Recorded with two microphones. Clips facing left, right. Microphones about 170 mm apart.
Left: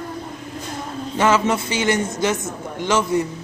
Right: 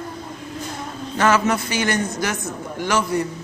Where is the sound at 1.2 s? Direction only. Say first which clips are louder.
Even; 25° left (ahead or behind).